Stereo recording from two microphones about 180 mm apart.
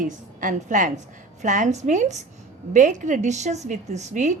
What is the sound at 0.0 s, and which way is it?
A woman's voice, 45° right (ahead or behind).